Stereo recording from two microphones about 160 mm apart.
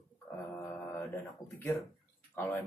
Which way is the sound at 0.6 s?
15° left (ahead or behind).